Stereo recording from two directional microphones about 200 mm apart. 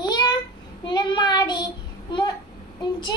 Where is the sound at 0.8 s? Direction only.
20° left (ahead or behind).